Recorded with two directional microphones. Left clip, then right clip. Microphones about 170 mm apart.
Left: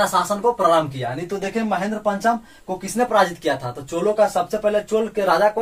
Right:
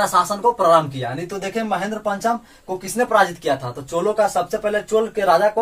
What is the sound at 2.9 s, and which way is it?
A man's voice, 15° left (ahead or behind).